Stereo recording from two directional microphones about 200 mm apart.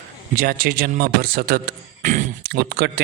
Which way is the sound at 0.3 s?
45° right (ahead or behind).